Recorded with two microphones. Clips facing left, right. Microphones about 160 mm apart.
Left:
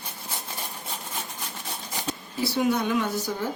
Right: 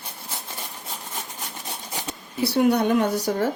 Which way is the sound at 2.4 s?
65° right (ahead or behind).